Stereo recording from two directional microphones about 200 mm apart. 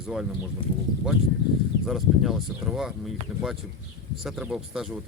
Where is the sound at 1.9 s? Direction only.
Centre (ahead or behind).